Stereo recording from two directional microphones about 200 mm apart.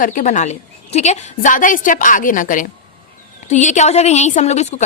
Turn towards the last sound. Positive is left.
turn(degrees=35)  # may be behind; listen again after turning